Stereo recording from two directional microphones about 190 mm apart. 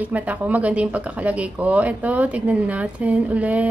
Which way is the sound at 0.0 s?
10° right (ahead or behind).